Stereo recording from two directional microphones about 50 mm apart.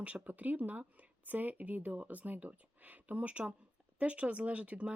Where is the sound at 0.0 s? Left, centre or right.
Right.